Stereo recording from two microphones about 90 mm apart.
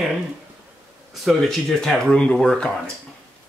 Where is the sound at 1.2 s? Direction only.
Centre (ahead or behind).